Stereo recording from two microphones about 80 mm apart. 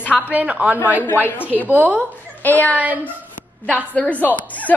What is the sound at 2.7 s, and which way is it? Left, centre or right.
Speech, centre.